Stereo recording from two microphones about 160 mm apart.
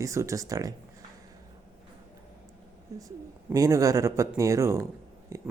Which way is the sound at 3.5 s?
20° right (ahead or behind).